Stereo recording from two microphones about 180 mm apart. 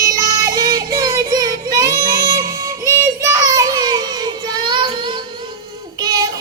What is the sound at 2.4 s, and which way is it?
Music, 20° right (ahead or behind).